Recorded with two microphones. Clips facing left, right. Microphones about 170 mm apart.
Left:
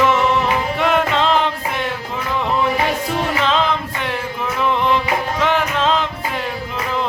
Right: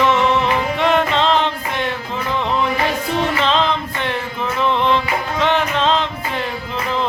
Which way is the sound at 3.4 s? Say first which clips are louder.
Even; 10° left (ahead or behind).